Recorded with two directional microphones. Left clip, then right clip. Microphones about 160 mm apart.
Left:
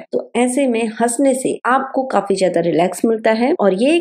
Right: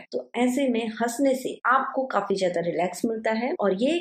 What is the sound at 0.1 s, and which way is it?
A woman's voice, 40° left (ahead or behind).